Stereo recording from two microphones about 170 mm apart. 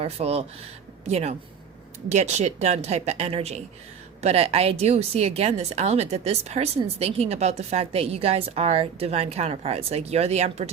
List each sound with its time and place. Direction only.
0.0 s speech: 35° right (ahead or behind)